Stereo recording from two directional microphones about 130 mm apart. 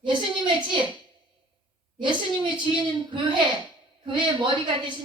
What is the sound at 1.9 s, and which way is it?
Speech, 35° right (ahead or behind).